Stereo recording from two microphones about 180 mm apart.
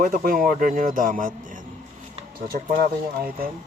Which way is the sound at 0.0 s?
50° right (ahead or behind).